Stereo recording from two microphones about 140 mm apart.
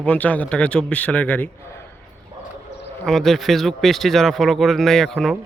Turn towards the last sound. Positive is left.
turn(degrees=5)  # may be behind; listen again after turning